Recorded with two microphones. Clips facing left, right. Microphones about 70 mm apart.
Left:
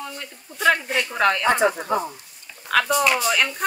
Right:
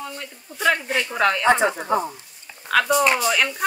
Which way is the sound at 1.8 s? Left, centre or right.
Centre.